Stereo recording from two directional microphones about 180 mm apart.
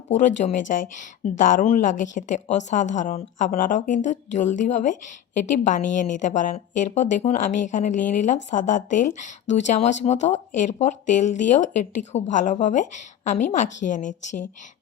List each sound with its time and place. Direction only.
0.1 s speech: 40° left (ahead or behind)